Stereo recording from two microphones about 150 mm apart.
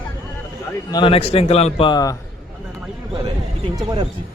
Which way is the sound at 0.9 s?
35° left (ahead or behind).